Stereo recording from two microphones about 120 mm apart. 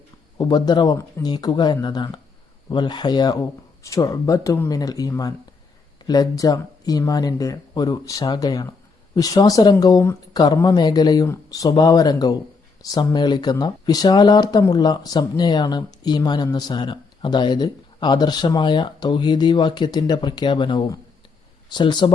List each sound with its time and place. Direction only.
0.3 s speech: 40° left (ahead or behind)